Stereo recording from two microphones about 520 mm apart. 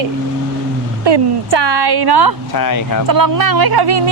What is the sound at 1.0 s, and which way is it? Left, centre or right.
Speech, right.